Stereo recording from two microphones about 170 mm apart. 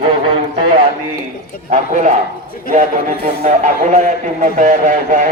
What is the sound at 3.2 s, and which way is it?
Speech, 45° right (ahead or behind).